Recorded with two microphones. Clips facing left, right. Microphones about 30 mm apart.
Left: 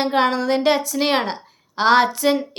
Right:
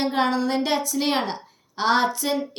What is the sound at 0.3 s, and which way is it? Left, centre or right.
Speech, left.